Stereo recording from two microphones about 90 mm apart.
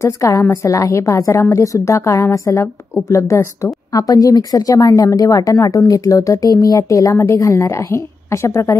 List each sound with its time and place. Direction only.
0.0 s a woman's voice: 35° left (ahead or behind)